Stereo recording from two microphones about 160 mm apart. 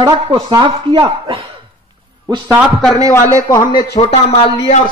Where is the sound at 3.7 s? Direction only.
75° left (ahead or behind).